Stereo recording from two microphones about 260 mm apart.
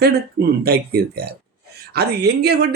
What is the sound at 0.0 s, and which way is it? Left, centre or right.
Speech, right.